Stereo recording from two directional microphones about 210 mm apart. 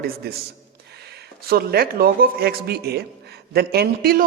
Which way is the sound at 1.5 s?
45° right (ahead or behind).